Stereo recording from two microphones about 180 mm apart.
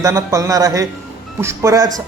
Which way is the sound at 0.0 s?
15° right (ahead or behind).